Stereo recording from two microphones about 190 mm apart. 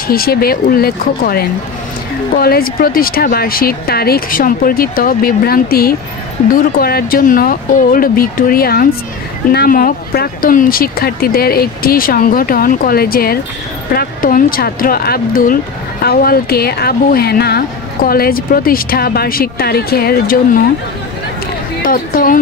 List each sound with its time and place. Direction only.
0.1 s speech: 55° left (ahead or behind)
21.8 s speech: 50° left (ahead or behind)